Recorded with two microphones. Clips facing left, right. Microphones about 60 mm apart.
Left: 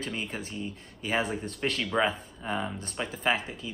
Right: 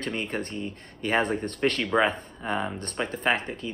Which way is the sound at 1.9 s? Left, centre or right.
Right.